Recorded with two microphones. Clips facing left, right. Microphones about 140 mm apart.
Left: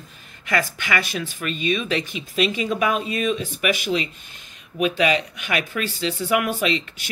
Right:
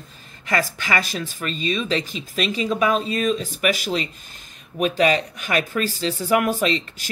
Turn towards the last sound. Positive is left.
turn(degrees=-40)  # may be behind; listen again after turning